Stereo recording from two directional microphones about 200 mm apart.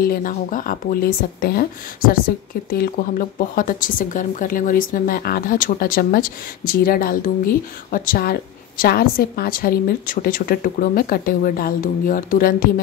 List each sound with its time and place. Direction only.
0.0 s speech: 45° left (ahead or behind)